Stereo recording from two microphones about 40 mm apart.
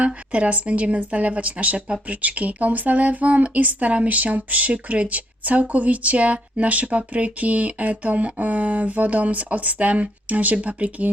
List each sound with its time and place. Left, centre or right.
0.0 s speech: right